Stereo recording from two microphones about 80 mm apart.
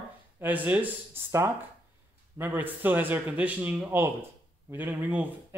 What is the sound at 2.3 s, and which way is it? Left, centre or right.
A man's voice, right.